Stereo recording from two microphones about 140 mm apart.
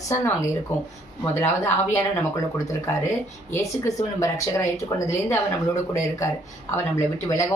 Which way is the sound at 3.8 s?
20° left (ahead or behind).